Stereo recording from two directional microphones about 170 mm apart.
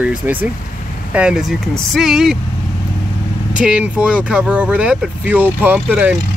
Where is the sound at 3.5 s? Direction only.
5° right (ahead or behind).